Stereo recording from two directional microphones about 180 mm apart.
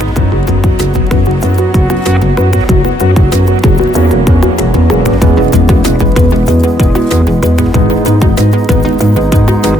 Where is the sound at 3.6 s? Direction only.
Centre (ahead or behind).